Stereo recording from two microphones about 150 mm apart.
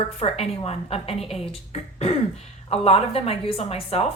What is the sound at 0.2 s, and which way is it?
A woman's voice, 40° left (ahead or behind).